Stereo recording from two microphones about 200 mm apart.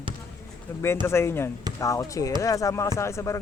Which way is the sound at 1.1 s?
10° left (ahead or behind).